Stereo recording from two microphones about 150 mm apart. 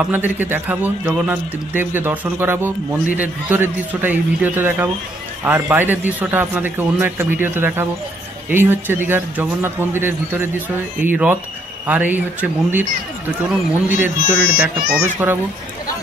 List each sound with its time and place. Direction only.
0.0 s a man's voice: 10° right (ahead or behind)